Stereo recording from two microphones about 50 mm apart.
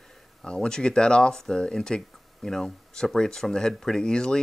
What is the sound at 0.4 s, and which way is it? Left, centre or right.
Speech, centre.